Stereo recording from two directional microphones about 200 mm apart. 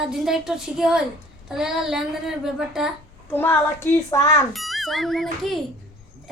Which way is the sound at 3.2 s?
10° left (ahead or behind).